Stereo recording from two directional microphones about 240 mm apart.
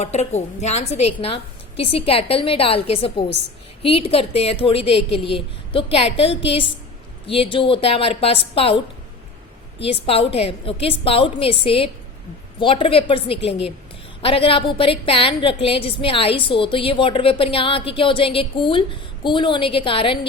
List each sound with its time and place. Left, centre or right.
0.0 s a woman's voice: left